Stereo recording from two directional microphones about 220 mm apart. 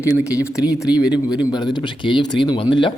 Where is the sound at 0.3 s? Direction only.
5° right (ahead or behind).